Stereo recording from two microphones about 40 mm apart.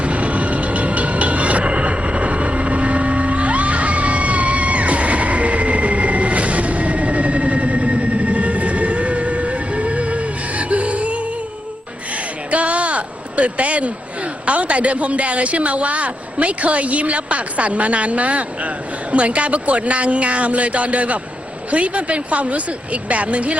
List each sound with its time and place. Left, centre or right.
0.0 s music: right
12.5 s a sound: right
14.4 s a woman's voice: right